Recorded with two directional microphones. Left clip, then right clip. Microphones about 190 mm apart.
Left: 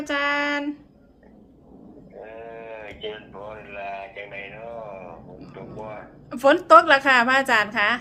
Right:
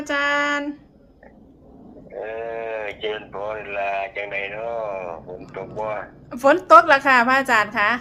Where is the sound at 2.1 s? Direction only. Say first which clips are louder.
Right 10 dB; 55° right (ahead or behind).